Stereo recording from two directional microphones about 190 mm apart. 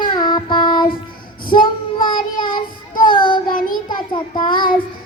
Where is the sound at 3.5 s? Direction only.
45° left (ahead or behind).